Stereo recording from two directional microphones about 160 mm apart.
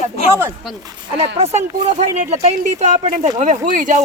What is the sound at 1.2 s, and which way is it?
Speech, 45° right (ahead or behind).